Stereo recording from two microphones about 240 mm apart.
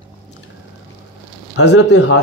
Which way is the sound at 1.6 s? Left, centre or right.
Left.